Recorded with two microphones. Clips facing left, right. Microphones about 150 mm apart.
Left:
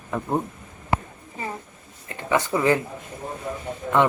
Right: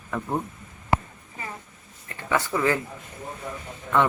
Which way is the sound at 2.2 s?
20° left (ahead or behind).